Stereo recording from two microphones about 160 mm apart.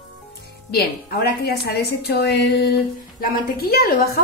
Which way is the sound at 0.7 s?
75° left (ahead or behind).